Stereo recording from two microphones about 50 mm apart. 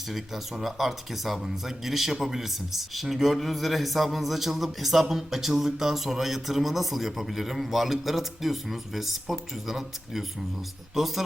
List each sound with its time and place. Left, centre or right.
0.1 s speech: centre